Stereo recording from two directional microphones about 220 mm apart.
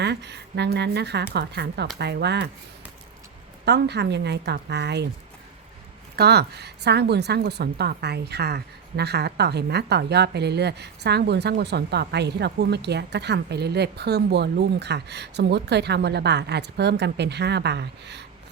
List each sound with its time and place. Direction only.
0.0 s a woman's voice: 50° right (ahead or behind)
3.7 s a woman's voice: 50° right (ahead or behind)
6.1 s a woman's voice: 50° right (ahead or behind)